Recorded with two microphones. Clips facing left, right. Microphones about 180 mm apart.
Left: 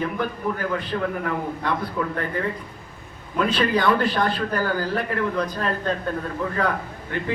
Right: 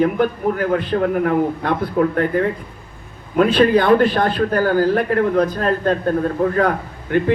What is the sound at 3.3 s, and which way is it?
A man's voice, 55° right (ahead or behind).